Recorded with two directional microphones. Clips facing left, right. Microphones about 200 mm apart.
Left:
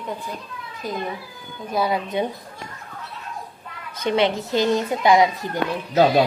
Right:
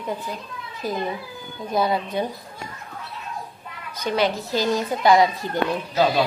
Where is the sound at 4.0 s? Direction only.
25° left (ahead or behind).